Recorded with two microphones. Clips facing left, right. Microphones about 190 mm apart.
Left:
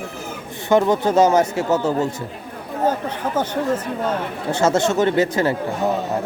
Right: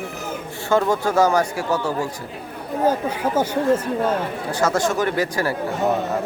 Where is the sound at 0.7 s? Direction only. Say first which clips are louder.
Left 3 dB; 20° left (ahead or behind).